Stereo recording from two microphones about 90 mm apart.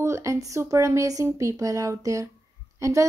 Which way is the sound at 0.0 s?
35° right (ahead or behind).